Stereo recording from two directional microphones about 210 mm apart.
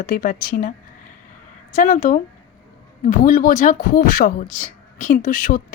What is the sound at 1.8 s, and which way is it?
Speech, 40° left (ahead or behind).